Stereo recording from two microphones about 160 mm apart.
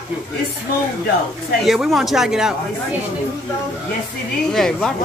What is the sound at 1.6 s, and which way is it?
A man's voice, centre (ahead or behind).